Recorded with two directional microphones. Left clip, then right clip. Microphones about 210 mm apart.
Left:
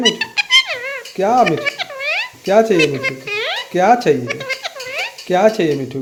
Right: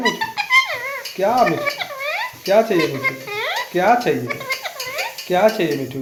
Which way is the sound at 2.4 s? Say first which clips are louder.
Left 3 dB; 55° left (ahead or behind).